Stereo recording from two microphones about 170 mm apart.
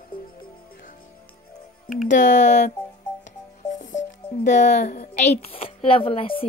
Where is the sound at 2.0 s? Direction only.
50° left (ahead or behind).